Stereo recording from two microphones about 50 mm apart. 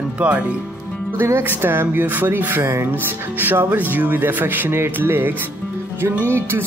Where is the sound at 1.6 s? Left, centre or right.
Right.